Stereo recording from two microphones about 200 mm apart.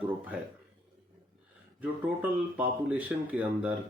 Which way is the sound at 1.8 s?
10° right (ahead or behind).